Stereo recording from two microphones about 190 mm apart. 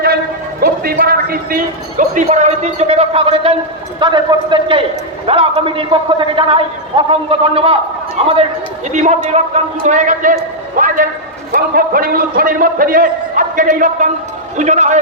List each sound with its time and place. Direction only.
0.6 s a man's voice: 50° right (ahead or behind)